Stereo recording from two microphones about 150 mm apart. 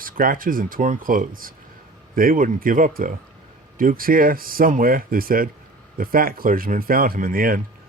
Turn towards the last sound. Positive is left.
turn(degrees=-70)  # may be behind; listen again after turning